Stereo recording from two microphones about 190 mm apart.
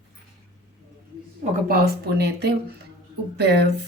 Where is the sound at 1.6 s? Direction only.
55° right (ahead or behind).